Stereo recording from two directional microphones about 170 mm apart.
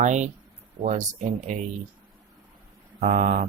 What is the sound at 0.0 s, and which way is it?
Speech, 45° right (ahead or behind).